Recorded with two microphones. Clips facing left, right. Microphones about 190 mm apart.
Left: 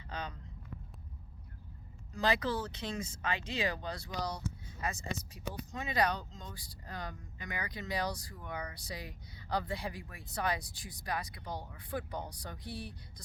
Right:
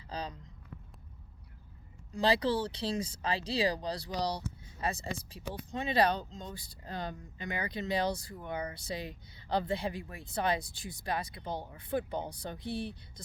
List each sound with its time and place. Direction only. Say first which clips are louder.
0.1 s speech: right 3 dB; 35° right (ahead or behind)
2.1 s speech: right 4 dB; 30° right (ahead or behind)